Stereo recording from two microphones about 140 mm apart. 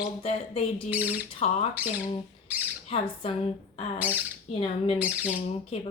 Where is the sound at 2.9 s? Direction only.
45° left (ahead or behind).